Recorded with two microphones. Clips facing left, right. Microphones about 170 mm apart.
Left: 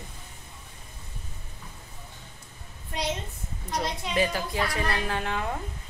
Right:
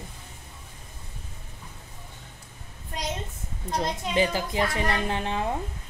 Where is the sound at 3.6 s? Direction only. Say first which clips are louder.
Right 2 dB; 25° right (ahead or behind).